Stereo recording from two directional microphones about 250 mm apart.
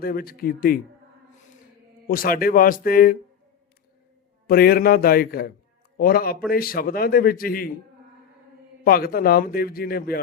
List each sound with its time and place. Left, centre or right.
0.0 s a man's voice: left
2.0 s a man's voice: left
4.4 s a man's voice: left
8.8 s a man's voice: left